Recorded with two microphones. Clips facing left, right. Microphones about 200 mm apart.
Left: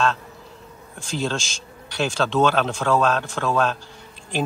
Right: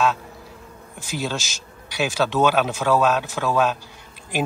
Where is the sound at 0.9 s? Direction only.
5° right (ahead or behind).